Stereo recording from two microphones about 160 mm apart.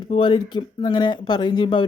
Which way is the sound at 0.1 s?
30° left (ahead or behind).